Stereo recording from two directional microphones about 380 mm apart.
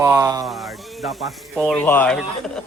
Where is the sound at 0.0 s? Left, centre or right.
Centre.